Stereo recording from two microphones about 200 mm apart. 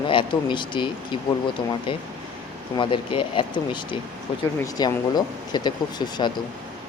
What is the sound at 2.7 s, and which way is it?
Speech, 25° left (ahead or behind).